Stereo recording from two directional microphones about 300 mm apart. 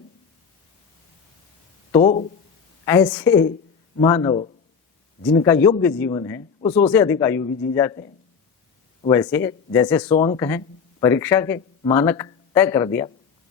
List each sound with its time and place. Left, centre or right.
1.9 s speech: centre
9.0 s speech: centre